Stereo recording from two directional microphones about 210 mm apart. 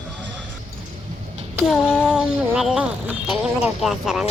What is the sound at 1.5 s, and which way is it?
Child singing, centre (ahead or behind).